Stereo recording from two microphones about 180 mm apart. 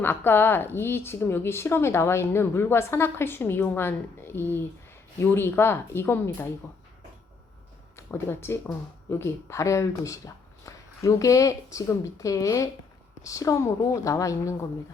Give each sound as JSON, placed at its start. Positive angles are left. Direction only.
{"t": 0.0, "sound": "a woman's voice", "side_deg": 10}
{"t": 7.9, "sound": "a woman's voice", "side_deg": 15}